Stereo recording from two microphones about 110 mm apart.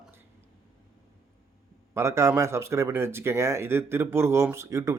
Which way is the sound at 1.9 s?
25° right (ahead or behind).